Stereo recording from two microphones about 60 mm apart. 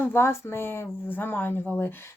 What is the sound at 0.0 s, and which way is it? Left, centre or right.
Speech, left.